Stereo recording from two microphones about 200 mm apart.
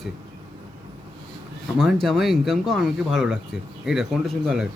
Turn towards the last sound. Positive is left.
turn(degrees=0)  # may be behind; listen again after turning